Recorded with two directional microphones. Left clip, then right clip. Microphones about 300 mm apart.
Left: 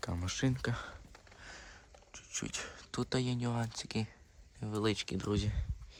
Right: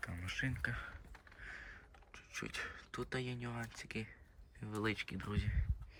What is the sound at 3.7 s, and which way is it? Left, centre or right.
Speech, centre.